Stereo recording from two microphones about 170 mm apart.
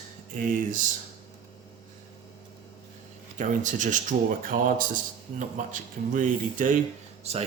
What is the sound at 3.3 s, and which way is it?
Speech, 50° right (ahead or behind).